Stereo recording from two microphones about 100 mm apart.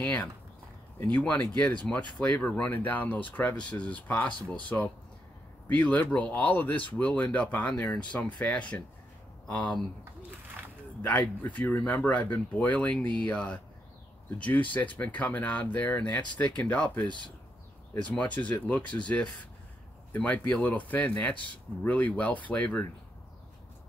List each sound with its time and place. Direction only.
0.0 s speech: 15° left (ahead or behind)
11.0 s speech: 15° left (ahead or behind)
14.7 s speech: 15° left (ahead or behind)